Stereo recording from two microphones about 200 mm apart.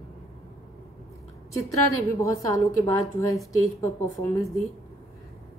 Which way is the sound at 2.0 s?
15° left (ahead or behind).